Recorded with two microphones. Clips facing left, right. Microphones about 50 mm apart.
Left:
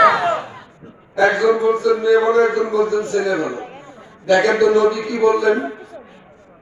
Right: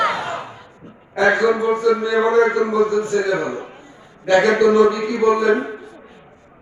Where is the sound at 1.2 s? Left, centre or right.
Centre.